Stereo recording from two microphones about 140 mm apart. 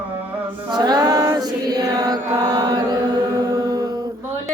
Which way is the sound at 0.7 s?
30° right (ahead or behind).